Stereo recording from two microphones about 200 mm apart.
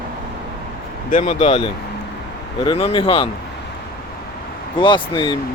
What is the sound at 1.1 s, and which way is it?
Speech, 35° left (ahead or behind).